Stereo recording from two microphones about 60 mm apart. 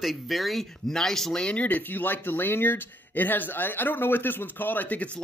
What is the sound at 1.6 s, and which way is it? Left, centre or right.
Speech, left.